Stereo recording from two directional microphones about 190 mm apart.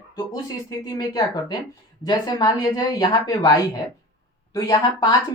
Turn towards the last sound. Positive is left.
turn(degrees=20)  # may be behind; listen again after turning